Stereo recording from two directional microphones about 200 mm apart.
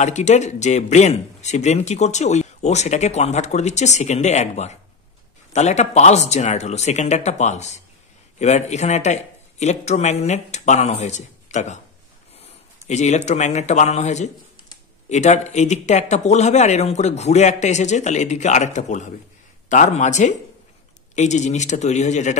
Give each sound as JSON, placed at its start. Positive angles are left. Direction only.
{"t": 0.0, "sound": "speech", "side_deg": 35}